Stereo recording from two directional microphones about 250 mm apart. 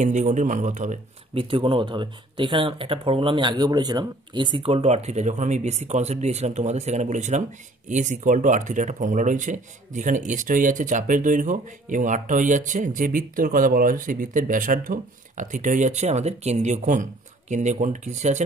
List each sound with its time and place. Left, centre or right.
0.0 s speech: right